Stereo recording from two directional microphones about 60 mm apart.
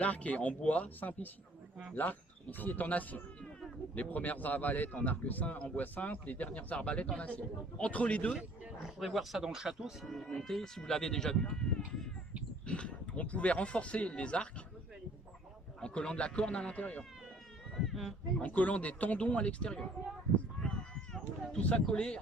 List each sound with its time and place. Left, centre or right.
0.0 s speech: left
8.8 s speech: centre
12.6 s speech: centre
15.8 s speech: centre
17.8 s speech: centre
18.3 s speech: left
20.6 s a sound: centre
21.6 s speech: centre